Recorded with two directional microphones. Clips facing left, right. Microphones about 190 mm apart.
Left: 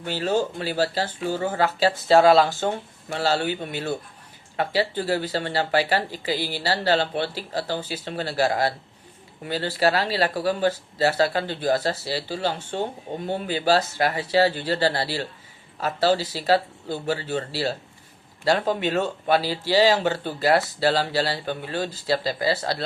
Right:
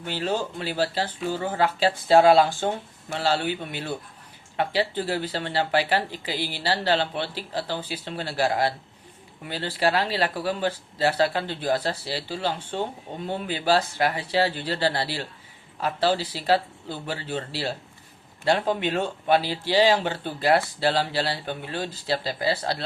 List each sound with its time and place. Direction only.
0.0 s speech: 45° left (ahead or behind)